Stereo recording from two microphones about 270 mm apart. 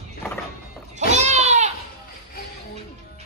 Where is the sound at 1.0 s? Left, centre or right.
Right.